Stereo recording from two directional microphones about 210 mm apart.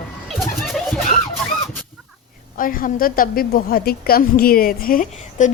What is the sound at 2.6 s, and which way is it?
A woman's voice, 40° left (ahead or behind).